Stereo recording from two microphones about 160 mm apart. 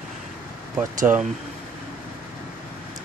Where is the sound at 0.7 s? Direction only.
10° right (ahead or behind).